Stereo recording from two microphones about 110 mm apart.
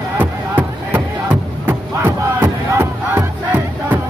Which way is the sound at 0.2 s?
15° right (ahead or behind).